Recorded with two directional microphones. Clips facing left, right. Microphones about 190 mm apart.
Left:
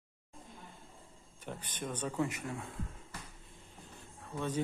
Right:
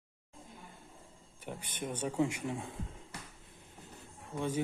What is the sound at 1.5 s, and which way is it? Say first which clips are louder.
Speech: right 1 dB; 10° right (ahead or behind).